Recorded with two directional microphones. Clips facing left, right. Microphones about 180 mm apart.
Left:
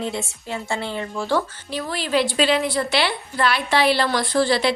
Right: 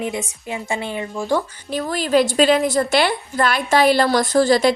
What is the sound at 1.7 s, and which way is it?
A woman's voice, 45° right (ahead or behind).